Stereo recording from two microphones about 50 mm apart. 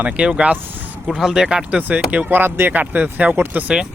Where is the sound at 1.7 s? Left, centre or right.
Right.